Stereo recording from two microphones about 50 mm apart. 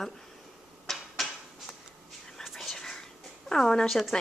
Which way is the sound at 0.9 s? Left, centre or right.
Centre.